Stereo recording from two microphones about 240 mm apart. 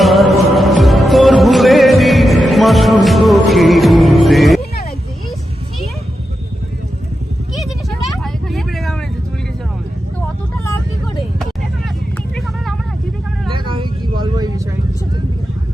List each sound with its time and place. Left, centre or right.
0.0 s music: centre
7.6 s vehicle: centre
13.5 s vehicle: centre